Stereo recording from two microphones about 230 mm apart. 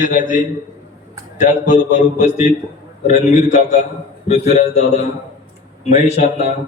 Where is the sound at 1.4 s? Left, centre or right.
Left.